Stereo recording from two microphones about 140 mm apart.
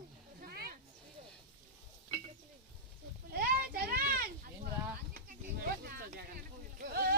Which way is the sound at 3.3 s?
90° right.